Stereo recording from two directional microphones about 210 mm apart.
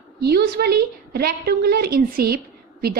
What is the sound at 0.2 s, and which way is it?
A woman's voice, 50° right (ahead or behind).